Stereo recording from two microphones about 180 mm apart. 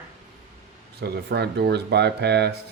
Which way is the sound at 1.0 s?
65° right (ahead or behind).